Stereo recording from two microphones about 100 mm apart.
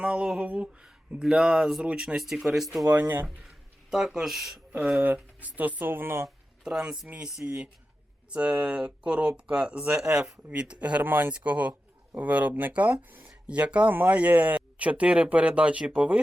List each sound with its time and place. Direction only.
0.0 s speech: 10° right (ahead or behind)
2.9 s speech: 15° right (ahead or behind)
3.9 s speech: 5° right (ahead or behind); by 6.2 s 25° right (ahead or behind)
6.2 s speech: 5° right (ahead or behind)